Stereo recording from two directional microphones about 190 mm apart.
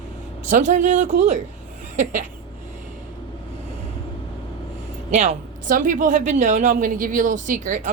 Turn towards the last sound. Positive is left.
turn(degrees=-40)  # may be behind; listen again after turning